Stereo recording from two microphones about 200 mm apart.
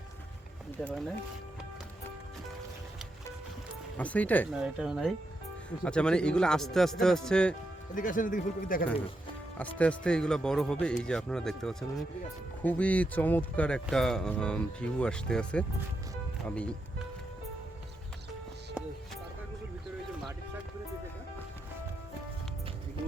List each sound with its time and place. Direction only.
0.8 s speech: 5° left (ahead or behind)
3.9 s speech: 5° left (ahead or behind)
4.5 s speech: 5° right (ahead or behind)
7.9 s speech: 40° left (ahead or behind)
9.6 s speech: 5° left (ahead or behind)